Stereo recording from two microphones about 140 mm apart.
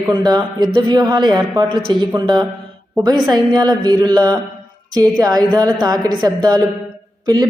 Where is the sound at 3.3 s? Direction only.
30° right (ahead or behind).